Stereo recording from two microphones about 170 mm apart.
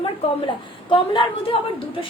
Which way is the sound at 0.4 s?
30° left (ahead or behind).